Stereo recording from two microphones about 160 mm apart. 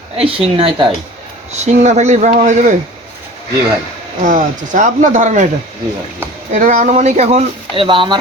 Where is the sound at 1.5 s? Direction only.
45° right (ahead or behind).